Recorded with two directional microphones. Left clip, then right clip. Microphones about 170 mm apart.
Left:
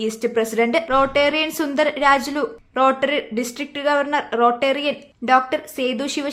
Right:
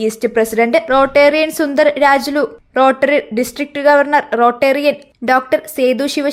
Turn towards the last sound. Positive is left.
turn(degrees=-30)  # may be behind; listen again after turning